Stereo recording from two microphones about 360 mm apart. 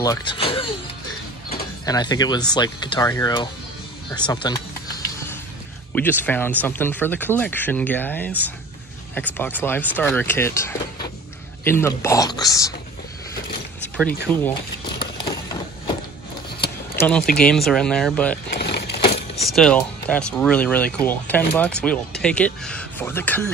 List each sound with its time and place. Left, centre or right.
0.0 s speech: centre
1.9 s speech: centre
5.9 s speech: centre
14.3 s speech: centre
16.6 s speech: centre
18.5 s a sound: left
19.4 s speech: centre